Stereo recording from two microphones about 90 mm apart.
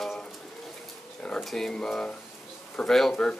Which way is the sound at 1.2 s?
5° left (ahead or behind).